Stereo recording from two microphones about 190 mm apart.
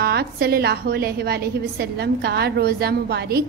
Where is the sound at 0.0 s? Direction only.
55° right (ahead or behind).